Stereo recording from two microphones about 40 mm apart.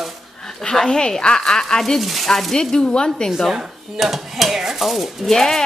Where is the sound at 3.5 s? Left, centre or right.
Centre.